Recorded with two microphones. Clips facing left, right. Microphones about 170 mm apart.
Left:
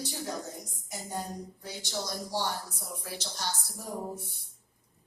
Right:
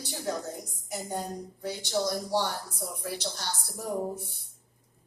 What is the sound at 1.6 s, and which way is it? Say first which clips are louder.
Speech: right 9 dB; 55° right (ahead or behind).